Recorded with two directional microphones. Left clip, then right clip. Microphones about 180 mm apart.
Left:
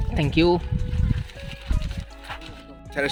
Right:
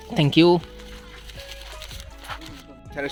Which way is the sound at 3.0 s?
60° left (ahead or behind).